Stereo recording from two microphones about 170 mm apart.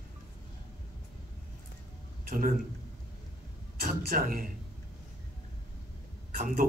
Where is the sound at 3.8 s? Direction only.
60° right (ahead or behind).